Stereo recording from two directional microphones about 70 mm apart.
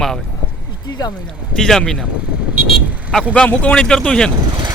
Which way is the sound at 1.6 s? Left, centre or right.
Centre.